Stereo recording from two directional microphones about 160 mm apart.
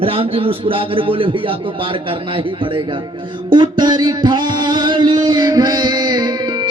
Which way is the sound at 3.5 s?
30° right (ahead or behind).